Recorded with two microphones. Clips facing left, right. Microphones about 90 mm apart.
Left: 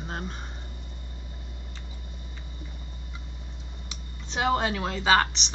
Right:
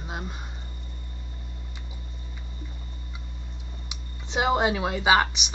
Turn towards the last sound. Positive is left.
turn(degrees=-10)  # may be behind; listen again after turning